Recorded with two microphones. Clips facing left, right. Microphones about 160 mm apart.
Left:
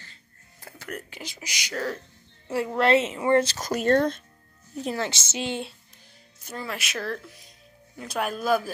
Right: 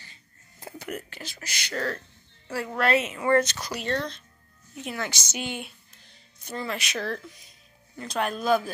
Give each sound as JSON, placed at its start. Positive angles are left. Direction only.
{"t": 0.0, "sound": "music", "side_deg": -20}
{"t": 1.1, "sound": "speech", "side_deg": 15}
{"t": 2.4, "sound": "a woman's voice", "side_deg": 20}
{"t": 3.5, "sound": "speech", "side_deg": 45}
{"t": 4.7, "sound": "a woman's voice", "side_deg": 30}
{"t": 6.4, "sound": "speech", "side_deg": 5}